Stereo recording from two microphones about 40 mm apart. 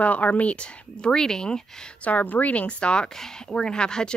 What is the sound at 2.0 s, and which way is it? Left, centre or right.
Speech, left.